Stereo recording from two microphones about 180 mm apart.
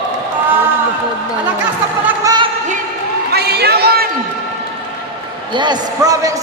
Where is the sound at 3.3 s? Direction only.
65° right (ahead or behind).